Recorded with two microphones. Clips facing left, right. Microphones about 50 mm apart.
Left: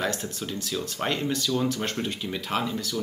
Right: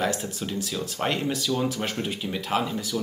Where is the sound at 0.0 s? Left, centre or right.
Centre.